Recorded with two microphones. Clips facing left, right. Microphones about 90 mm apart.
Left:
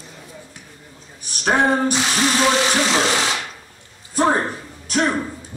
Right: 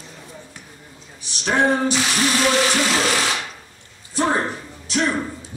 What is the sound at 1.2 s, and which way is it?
Speech, 50° left (ahead or behind).